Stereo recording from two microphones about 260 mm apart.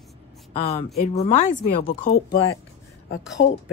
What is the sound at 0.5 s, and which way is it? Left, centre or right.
A woman's voice, left.